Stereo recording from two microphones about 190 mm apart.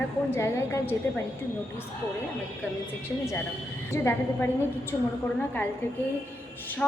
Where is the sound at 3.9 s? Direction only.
15° left (ahead or behind).